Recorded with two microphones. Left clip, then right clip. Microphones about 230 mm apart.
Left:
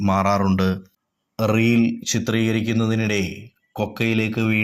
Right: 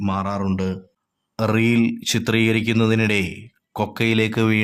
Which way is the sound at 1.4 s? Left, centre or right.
Centre.